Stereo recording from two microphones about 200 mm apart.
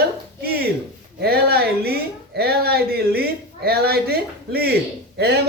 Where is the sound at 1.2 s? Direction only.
50° right (ahead or behind).